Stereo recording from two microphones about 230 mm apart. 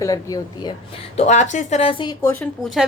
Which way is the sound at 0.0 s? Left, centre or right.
Centre.